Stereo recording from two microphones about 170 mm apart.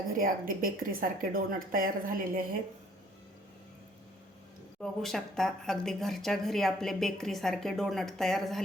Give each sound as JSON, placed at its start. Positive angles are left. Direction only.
{"t": 0.2, "sound": "a woman's voice", "side_deg": -55}
{"t": 4.8, "sound": "speech", "side_deg": 0}